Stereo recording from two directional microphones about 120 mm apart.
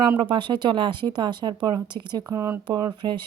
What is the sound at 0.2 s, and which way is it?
Speech, 40° right (ahead or behind).